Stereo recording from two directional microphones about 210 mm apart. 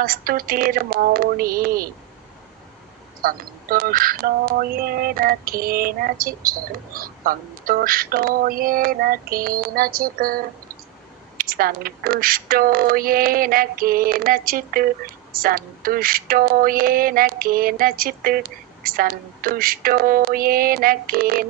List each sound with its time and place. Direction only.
0.0 s speech: 45° right (ahead or behind)
3.2 s speech: 45° right (ahead or behind)